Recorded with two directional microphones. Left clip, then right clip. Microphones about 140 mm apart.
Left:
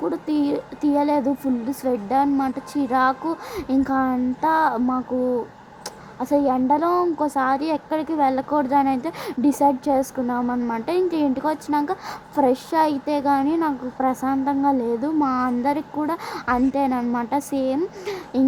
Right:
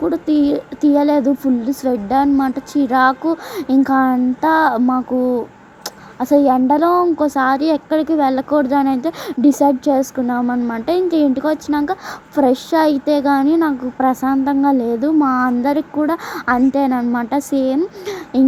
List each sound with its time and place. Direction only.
0.0 s a child's voice: 20° right (ahead or behind)
6.1 s a child's voice: 25° right (ahead or behind)